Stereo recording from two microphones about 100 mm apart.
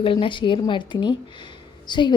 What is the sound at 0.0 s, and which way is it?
A woman's voice, 65° left (ahead or behind).